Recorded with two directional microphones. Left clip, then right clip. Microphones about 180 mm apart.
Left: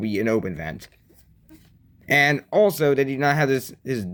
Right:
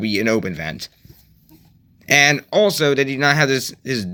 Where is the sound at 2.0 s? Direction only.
20° left (ahead or behind).